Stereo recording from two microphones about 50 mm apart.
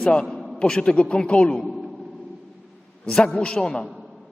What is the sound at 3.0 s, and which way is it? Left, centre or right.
Speech, centre.